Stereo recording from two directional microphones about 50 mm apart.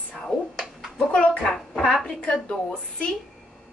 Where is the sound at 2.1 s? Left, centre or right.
Centre.